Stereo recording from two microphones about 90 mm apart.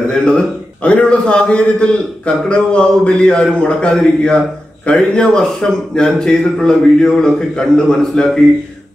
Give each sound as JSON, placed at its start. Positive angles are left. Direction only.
{"t": 0.1, "sound": "a man's voice", "side_deg": 10}